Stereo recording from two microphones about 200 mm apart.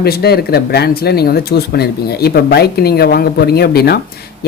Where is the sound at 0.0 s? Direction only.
50° left (ahead or behind).